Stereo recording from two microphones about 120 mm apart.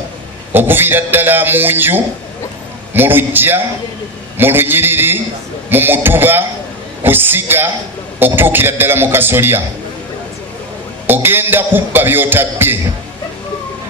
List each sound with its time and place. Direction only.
0.5 s a man's voice: 15° right (ahead or behind)
11.1 s a man's voice: 15° right (ahead or behind)